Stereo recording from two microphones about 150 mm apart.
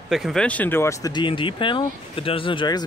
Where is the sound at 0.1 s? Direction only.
Centre (ahead or behind).